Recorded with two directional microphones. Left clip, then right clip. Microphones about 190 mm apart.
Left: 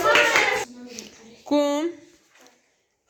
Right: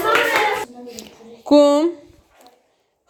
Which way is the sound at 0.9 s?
35° right (ahead or behind).